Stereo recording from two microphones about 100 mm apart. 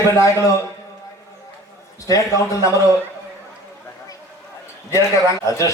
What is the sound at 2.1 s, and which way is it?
Speech, 35° left (ahead or behind).